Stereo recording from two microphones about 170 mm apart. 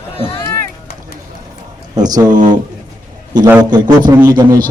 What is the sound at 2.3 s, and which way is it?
Speech, 50° right (ahead or behind).